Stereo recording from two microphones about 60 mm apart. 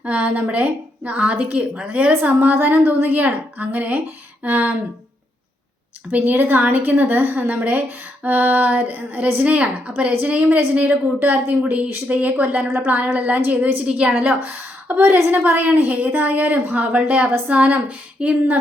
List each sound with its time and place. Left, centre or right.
0.0 s a woman's voice: right
2.4 s a woman's voice: right
6.1 s a woman's voice: right
12.6 s a woman's voice: right